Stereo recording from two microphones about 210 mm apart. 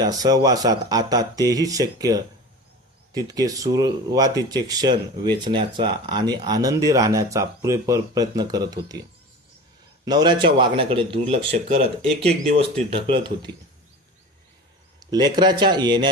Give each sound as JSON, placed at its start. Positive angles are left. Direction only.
{"t": 0.0, "sound": "speech", "side_deg": -20}
{"t": 10.1, "sound": "speech", "side_deg": -20}
{"t": 15.1, "sound": "speech", "side_deg": -20}